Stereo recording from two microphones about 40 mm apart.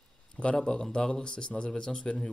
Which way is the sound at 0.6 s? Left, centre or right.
Centre.